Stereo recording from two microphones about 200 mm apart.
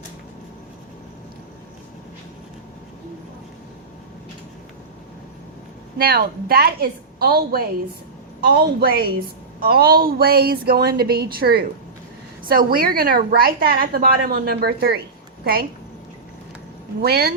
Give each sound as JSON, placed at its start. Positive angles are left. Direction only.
{"t": 6.0, "sound": "a woman's voice", "side_deg": -45}
{"t": 17.0, "sound": "a woman's voice", "side_deg": -50}